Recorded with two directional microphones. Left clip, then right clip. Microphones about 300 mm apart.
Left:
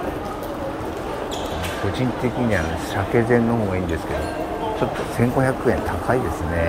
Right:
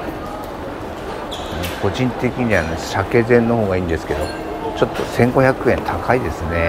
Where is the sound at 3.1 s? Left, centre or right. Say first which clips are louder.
Right 5 dB; centre.